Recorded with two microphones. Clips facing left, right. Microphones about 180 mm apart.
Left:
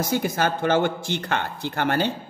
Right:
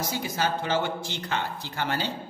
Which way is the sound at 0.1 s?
55° left (ahead or behind).